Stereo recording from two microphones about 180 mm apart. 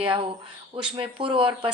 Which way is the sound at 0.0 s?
30° right (ahead or behind).